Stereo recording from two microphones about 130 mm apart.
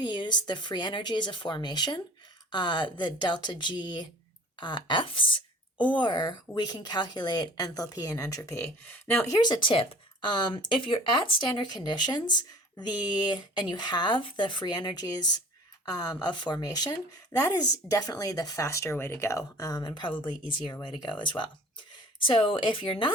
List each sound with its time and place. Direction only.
0.0 s a woman's voice: 35° left (ahead or behind); by 9.4 s 20° left (ahead or behind)
9.4 s a woman's voice: 35° left (ahead or behind)